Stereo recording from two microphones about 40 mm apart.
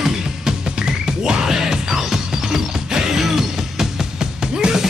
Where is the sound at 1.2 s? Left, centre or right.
Centre.